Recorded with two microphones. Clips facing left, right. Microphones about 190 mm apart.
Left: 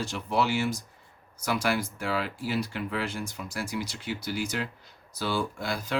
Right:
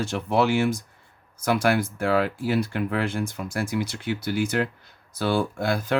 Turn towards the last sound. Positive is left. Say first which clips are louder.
# right 7 dB
turn(degrees=-55)  # may be behind; listen again after turning